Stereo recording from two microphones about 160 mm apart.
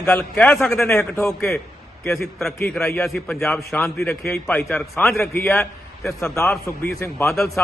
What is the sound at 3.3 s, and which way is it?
Speech, 15° left (ahead or behind).